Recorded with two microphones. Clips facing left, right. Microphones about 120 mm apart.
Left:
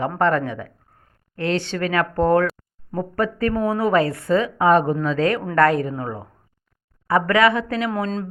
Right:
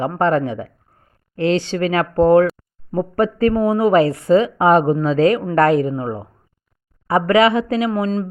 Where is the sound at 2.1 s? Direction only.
15° right (ahead or behind).